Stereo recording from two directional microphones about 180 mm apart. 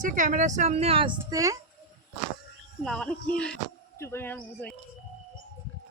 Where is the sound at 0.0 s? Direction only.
45° right (ahead or behind); by 1.5 s 20° right (ahead or behind).